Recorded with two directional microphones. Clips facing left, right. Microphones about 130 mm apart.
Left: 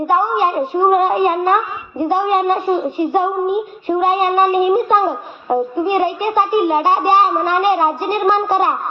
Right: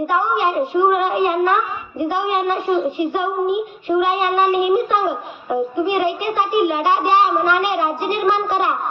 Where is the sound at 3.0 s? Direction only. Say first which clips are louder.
Left 3 dB; 40° left (ahead or behind).